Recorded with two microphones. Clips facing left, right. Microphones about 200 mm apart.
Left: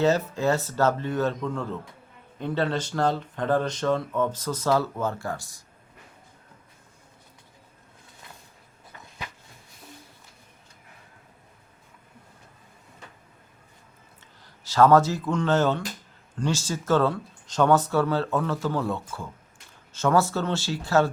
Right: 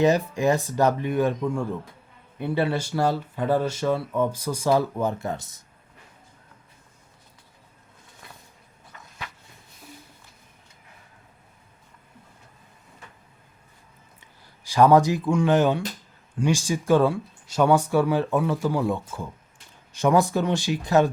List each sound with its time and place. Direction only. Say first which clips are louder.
0.0 s speech: right 2 dB; 15° right (ahead or behind)
14.2 s speech: even; 15° right (ahead or behind)